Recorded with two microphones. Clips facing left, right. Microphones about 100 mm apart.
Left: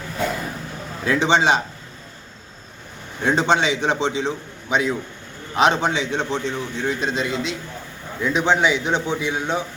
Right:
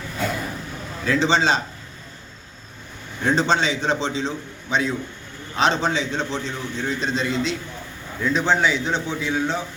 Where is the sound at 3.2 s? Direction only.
15° left (ahead or behind).